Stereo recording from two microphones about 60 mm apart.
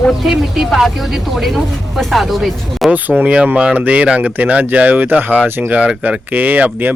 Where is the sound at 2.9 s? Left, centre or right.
Right.